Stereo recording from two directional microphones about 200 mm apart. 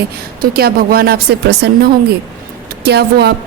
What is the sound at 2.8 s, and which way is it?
Speech, 55° right (ahead or behind).